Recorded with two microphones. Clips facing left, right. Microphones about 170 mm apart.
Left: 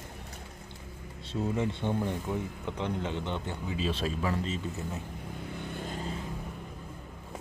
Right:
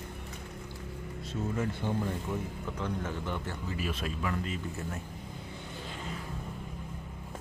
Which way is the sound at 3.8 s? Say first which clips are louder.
Left 4 dB; 30° left (ahead or behind).